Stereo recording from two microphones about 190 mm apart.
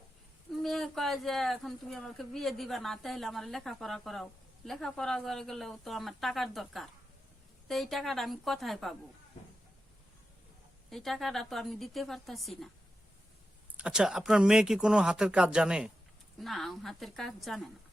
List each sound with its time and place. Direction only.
0.5 s speech: centre (ahead or behind)
10.8 s speech: centre (ahead or behind)
13.7 s speech: 5° right (ahead or behind)